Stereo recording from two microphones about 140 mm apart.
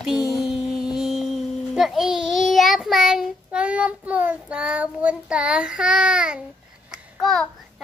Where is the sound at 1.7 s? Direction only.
5° right (ahead or behind).